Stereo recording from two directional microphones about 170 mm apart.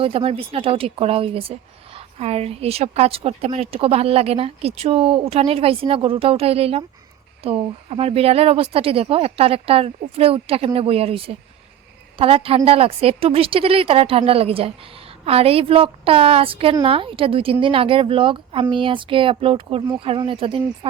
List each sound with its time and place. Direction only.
0.0 s speech: 35° right (ahead or behind)